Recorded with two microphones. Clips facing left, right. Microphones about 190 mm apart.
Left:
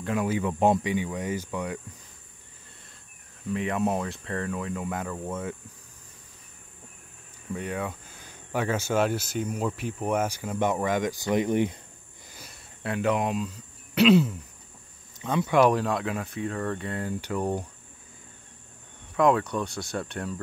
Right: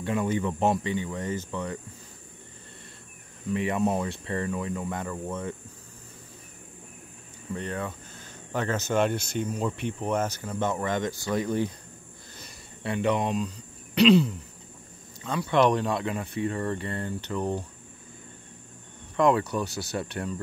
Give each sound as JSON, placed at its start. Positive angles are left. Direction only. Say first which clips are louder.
{"t": 0.0, "sound": "speech", "louder": "even", "side_deg": 5}
{"t": 3.5, "sound": "speech", "louder": "right 1 dB", "side_deg": 0}
{"t": 7.5, "sound": "speech", "louder": "left 1 dB", "side_deg": 10}
{"t": 12.4, "sound": "cricket", "louder": "even", "side_deg": 0}
{"t": 15.2, "sound": "speech", "louder": "left 4 dB", "side_deg": 20}
{"t": 15.5, "sound": "speech", "louder": "left 1 dB", "side_deg": 5}
{"t": 19.1, "sound": "speech", "louder": "even", "side_deg": 0}